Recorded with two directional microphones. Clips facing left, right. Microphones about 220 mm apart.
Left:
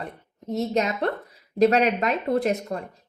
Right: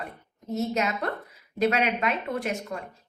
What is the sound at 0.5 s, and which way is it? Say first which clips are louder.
Speech: left 3 dB; 35° left (ahead or behind).